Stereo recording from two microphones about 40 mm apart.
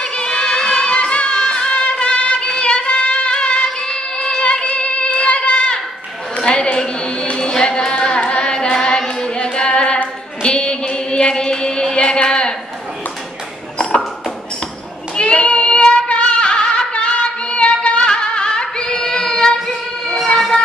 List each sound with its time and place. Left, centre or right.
0.0 s music: left
6.3 s a sound: left
8.3 s carnatic music: left
8.7 s singing: centre
10.4 s music: left
13.7 s a sound: left
15.1 s child singing: left
16.1 s music: left
20.2 s emergency vehicle: centre